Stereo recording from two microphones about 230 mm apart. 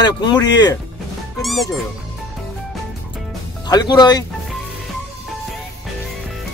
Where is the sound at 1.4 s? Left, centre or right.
Centre.